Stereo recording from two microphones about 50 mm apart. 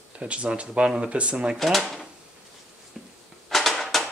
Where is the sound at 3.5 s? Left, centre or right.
Centre.